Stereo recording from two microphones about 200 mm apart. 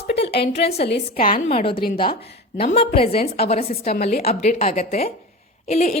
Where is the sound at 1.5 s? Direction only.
25° left (ahead or behind).